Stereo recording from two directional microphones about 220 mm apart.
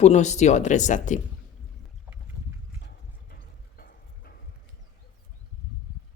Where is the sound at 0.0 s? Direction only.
30° left (ahead or behind).